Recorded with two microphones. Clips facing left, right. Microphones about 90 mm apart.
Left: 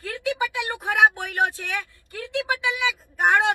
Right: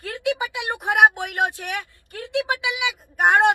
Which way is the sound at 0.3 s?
20° right (ahead or behind).